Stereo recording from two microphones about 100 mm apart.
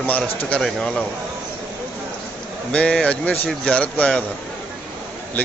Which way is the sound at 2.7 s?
10° left (ahead or behind).